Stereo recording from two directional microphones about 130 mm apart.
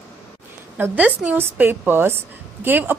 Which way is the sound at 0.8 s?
10° right (ahead or behind).